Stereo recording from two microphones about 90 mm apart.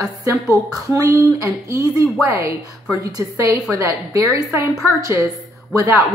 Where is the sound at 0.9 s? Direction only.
35° right (ahead or behind).